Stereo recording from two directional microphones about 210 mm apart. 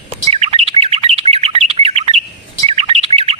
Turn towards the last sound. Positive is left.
turn(degrees=-25)  # may be behind; listen again after turning